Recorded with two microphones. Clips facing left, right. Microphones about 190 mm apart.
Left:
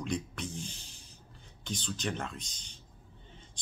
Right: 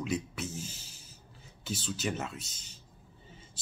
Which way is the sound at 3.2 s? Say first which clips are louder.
Right 2 dB; 5° right (ahead or behind).